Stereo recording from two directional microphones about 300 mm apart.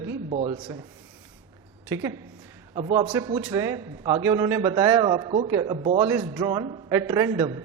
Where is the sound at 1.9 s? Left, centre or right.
Centre.